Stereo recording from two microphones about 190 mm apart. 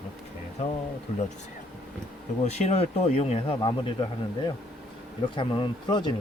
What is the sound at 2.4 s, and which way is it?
Speech, 35° left (ahead or behind).